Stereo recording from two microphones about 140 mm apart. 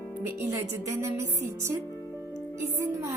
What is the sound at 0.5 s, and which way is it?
A woman's voice, 20° right (ahead or behind).